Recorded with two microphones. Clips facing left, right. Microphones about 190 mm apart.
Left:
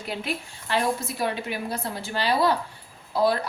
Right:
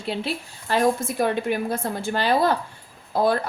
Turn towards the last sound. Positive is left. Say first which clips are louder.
# right 1 dB
turn(degrees=-50)  # may be behind; listen again after turning